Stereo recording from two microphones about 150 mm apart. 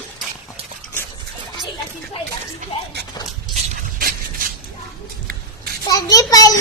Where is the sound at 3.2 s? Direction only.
25° left (ahead or behind).